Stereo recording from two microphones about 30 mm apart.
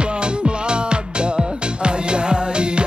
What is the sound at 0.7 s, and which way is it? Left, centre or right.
Music, right.